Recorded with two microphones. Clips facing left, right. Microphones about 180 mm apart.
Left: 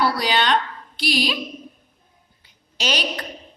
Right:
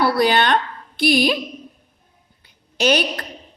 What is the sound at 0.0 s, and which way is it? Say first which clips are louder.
A woman's voice: right 4 dB; 55° right (ahead or behind).